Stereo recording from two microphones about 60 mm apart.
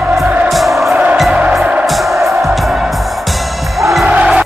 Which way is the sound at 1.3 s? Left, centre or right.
Centre.